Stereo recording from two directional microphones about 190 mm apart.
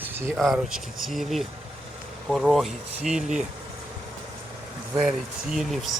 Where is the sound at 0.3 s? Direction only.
Centre (ahead or behind).